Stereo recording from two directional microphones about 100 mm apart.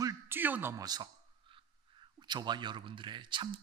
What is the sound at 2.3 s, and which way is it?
Speech, 50° right (ahead or behind).